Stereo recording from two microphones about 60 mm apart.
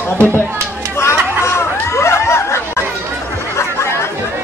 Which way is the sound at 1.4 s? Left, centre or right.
Left.